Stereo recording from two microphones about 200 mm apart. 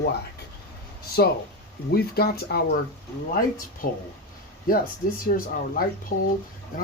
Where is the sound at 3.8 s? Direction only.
45° left (ahead or behind).